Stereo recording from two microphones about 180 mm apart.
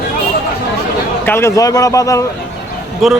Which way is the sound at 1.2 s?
15° left (ahead or behind).